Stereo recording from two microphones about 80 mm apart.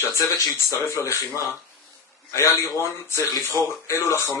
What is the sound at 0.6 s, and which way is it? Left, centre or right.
Speech, left.